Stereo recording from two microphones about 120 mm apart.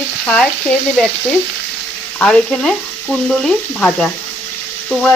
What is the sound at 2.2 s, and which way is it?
Frying, 5° left (ahead or behind).